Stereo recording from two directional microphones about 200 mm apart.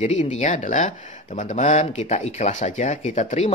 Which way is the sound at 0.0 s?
40° left (ahead or behind).